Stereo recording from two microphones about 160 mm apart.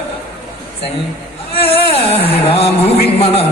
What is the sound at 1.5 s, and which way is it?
Speech, 35° left (ahead or behind).